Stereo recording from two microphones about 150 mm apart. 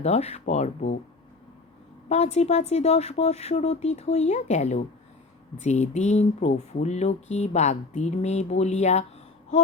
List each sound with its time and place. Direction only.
0.0 s speech: 45° left (ahead or behind)
2.0 s speech: 45° left (ahead or behind)